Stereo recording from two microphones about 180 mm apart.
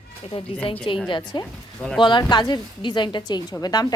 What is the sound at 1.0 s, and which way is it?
A woman's voice, 25° left (ahead or behind).